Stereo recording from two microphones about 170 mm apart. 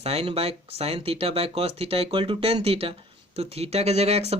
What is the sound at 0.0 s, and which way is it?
Speech, 35° right (ahead or behind).